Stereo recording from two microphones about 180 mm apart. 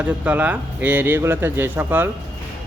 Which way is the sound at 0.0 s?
10° right (ahead or behind).